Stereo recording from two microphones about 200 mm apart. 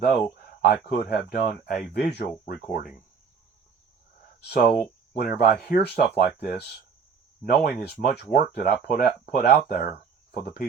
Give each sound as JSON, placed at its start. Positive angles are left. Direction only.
{"t": 0.6, "sound": "speech", "side_deg": 55}
{"t": 4.4, "sound": "speech", "side_deg": 50}